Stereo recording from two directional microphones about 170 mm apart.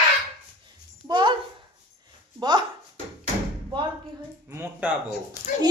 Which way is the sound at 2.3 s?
25° right (ahead or behind).